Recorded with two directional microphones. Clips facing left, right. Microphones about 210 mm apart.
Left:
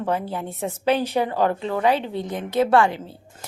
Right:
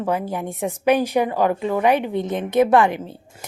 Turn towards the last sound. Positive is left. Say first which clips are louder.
# right 2 dB
turn(degrees=-20)  # may be behind; listen again after turning